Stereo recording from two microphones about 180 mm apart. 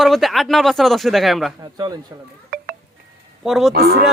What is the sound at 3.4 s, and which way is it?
Speech, centre (ahead or behind).